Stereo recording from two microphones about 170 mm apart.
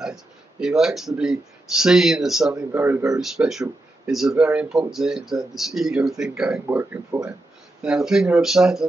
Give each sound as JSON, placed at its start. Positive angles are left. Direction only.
{"t": 0.0, "sound": "speech", "side_deg": -5}
{"t": 3.2, "sound": "speech", "side_deg": 0}
{"t": 7.8, "sound": "speech", "side_deg": -5}